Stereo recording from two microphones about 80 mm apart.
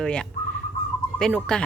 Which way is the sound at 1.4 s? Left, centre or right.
Centre.